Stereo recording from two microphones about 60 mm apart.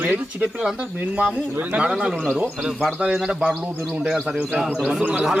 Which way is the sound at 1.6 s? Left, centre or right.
Right.